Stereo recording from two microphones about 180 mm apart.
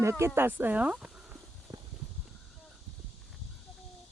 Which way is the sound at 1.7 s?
20° right (ahead or behind).